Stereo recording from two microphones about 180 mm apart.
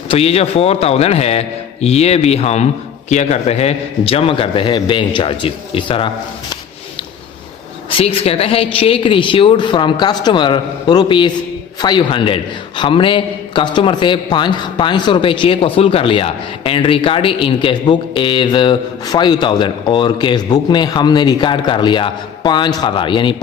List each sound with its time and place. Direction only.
0.1 s a man's voice: 35° left (ahead or behind)
7.9 s a man's voice: 30° left (ahead or behind)